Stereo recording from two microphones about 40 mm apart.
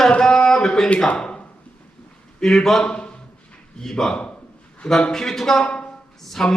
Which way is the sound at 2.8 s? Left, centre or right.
Left.